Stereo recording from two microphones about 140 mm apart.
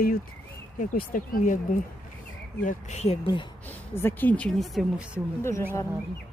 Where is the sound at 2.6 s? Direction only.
60° left (ahead or behind).